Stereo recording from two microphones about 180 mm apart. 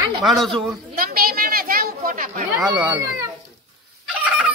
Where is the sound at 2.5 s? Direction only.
5° right (ahead or behind).